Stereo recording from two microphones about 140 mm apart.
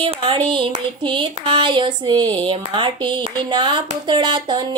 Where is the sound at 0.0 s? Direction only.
35° right (ahead or behind).